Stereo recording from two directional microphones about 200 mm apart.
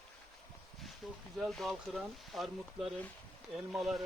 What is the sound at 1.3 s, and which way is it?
Speech, centre (ahead or behind).